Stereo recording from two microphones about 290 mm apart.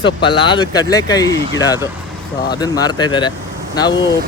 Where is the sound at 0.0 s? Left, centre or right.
Centre.